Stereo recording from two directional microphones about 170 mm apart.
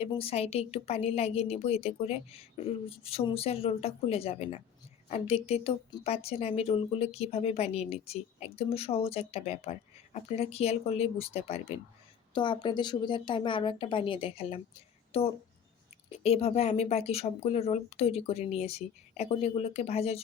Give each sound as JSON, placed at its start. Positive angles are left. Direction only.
{"t": 0.0, "sound": "a woman's voice", "side_deg": 35}